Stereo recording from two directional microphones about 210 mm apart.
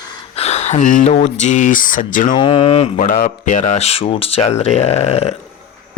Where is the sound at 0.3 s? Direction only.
30° left (ahead or behind).